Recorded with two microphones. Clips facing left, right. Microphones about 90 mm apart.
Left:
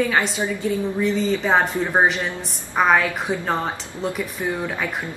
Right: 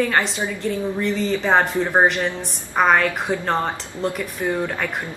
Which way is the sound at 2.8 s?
Centre (ahead or behind).